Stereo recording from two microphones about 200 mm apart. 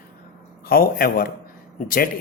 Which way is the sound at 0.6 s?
50° left (ahead or behind).